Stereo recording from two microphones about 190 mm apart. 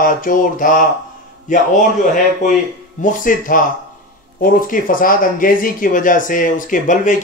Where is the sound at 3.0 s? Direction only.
45° left (ahead or behind).